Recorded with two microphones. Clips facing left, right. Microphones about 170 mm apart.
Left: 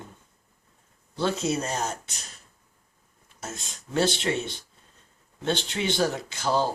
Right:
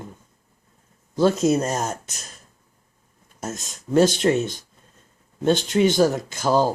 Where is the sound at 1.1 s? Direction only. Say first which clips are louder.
Right 8 dB; 45° right (ahead or behind).